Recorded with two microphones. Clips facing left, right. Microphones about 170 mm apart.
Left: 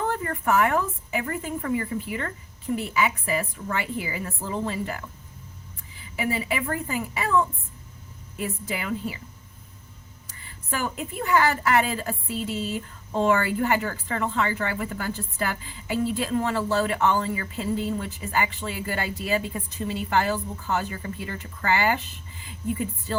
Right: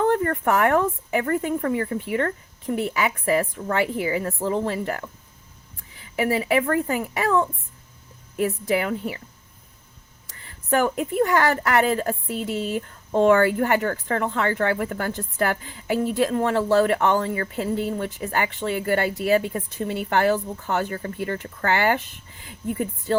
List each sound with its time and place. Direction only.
0.1 s a woman's voice: 55° right (ahead or behind)
6.1 s a woman's voice: 65° right (ahead or behind)
10.9 s a woman's voice: 65° right (ahead or behind)